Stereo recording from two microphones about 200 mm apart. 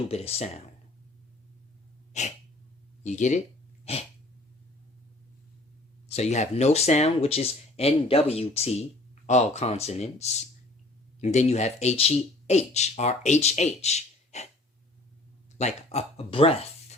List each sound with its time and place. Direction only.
0.1 s speech: 30° left (ahead or behind)
3.0 s speech: 35° left (ahead or behind)
6.1 s speech: 35° left (ahead or behind)
15.5 s speech: 35° left (ahead or behind)